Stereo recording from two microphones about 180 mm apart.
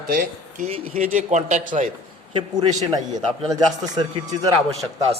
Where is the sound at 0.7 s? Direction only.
35° right (ahead or behind).